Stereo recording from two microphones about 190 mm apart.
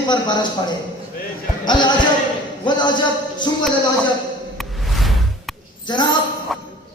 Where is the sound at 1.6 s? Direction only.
25° left (ahead or behind).